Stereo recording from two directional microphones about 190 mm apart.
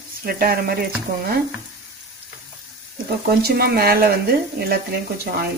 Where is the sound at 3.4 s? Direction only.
55° right (ahead or behind).